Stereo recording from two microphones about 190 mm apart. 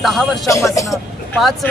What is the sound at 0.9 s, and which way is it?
Speech, centre (ahead or behind).